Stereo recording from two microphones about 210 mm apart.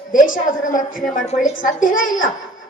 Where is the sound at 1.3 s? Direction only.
35° left (ahead or behind).